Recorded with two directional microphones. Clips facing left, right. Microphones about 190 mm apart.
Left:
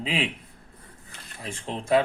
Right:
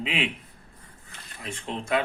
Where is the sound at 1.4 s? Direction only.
30° left (ahead or behind).